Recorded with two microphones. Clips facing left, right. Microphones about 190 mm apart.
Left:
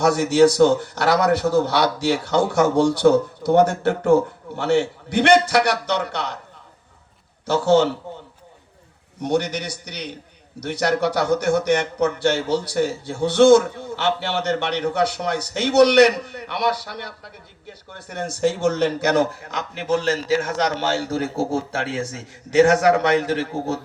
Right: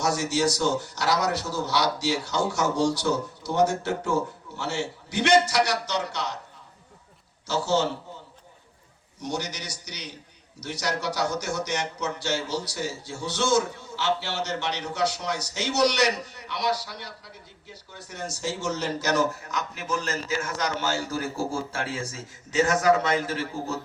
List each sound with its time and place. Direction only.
0.0 s a man's voice: 60° left (ahead or behind)
7.4 s a man's voice: 55° left (ahead or behind)
9.2 s a man's voice: 60° left (ahead or behind)